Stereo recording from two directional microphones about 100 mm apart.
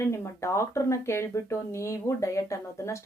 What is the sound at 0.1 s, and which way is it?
Speech, 30° left (ahead or behind).